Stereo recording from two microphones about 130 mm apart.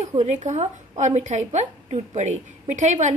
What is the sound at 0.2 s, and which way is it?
A woman's voice, 65° right (ahead or behind).